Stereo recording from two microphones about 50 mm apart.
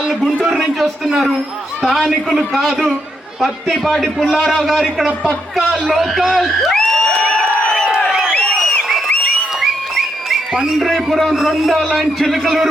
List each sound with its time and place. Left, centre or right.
0.4 s a man's voice: centre
4.6 s a man's voice: centre
6.7 s crowd: centre
8.3 s a sound: left
9.6 s a sound: centre
10.5 s a man's voice: centre
10.8 s a man's voice: centre